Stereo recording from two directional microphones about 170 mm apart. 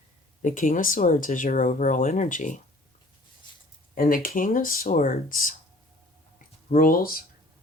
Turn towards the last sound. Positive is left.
turn(degrees=60)  # may be behind; listen again after turning